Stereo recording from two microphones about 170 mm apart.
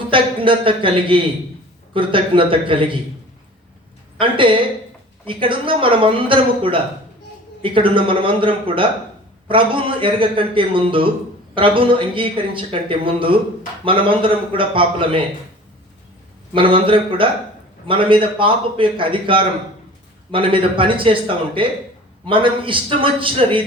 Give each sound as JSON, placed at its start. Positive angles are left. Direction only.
{"t": 0.1, "sound": "speech", "side_deg": -30}
{"t": 4.2, "sound": "a woman's voice", "side_deg": -30}
{"t": 16.6, "sound": "speech", "side_deg": -30}